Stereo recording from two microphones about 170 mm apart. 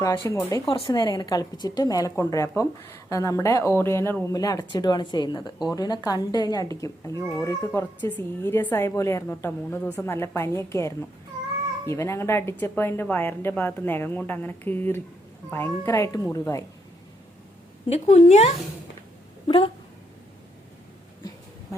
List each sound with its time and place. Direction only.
0.3 s a woman's voice: 20° left (ahead or behind)
17.8 s a woman's voice: 40° left (ahead or behind)
19.5 s a woman's voice: 30° left (ahead or behind)